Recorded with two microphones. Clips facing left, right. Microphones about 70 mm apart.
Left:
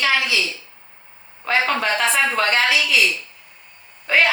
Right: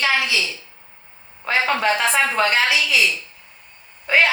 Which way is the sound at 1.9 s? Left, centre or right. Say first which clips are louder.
Right 1 dB; centre.